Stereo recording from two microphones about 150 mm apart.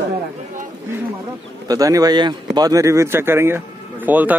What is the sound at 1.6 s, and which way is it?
Speech, 25° right (ahead or behind).